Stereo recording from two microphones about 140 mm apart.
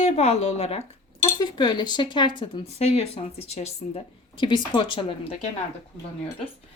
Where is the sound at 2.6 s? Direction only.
50° left (ahead or behind).